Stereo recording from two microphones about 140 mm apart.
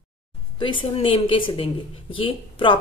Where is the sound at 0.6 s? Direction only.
35° left (ahead or behind).